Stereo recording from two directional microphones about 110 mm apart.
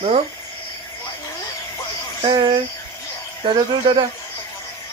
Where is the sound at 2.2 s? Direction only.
50° right (ahead or behind).